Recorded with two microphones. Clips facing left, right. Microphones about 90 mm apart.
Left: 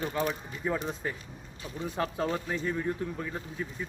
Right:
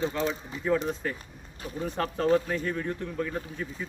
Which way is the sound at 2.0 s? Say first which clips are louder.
Right 6 dB; 10° left (ahead or behind).